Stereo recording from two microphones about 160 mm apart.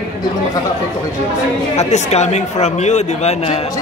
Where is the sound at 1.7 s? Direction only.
45° left (ahead or behind).